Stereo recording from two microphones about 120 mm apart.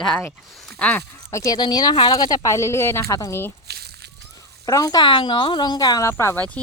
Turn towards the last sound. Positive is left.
turn(degrees=20)  # may be behind; listen again after turning